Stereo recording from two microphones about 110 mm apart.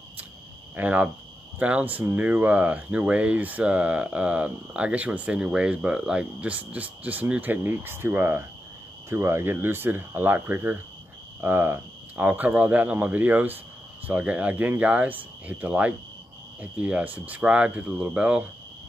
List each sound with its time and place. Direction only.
0.7 s speech: 15° right (ahead or behind)